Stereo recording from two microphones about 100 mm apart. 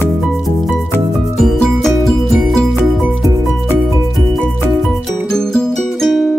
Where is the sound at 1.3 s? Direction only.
5° left (ahead or behind).